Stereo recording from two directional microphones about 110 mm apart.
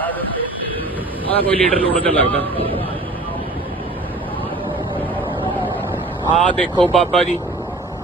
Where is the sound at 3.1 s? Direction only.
15° left (ahead or behind).